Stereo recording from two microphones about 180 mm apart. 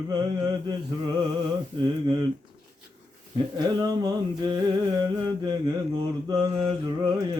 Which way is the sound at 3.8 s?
20° right (ahead or behind).